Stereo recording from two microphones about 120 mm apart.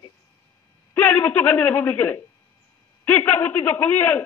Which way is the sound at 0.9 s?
15° left (ahead or behind).